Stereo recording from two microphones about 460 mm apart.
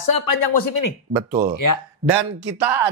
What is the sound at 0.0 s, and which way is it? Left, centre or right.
Speech, left.